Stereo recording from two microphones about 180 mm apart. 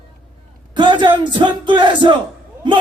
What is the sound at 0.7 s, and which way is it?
A man's voice, 25° right (ahead or behind).